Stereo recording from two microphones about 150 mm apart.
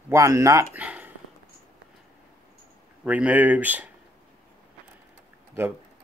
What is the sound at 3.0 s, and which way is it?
Speech, 10° right (ahead or behind).